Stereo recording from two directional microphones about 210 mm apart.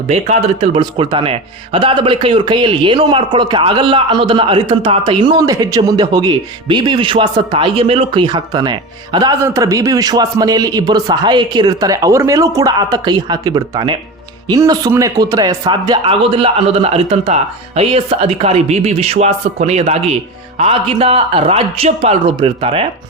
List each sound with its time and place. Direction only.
0.1 s speech: 30° right (ahead or behind)